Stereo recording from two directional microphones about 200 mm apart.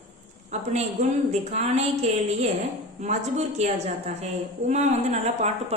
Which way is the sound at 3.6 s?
35° right (ahead or behind).